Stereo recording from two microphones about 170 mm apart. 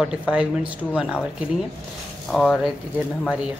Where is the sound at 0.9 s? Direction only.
5° right (ahead or behind).